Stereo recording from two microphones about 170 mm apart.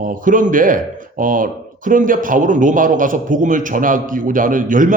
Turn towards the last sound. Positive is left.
turn(degrees=-50)  # may be behind; listen again after turning